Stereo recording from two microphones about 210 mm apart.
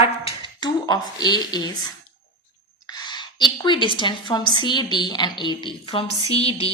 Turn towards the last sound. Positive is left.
turn(degrees=30)  # may be behind; listen again after turning